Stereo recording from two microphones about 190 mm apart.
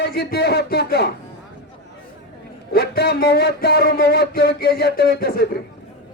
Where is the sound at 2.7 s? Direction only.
60° left (ahead or behind).